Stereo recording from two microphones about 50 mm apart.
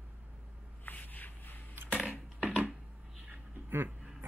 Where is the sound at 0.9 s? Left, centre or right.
Left.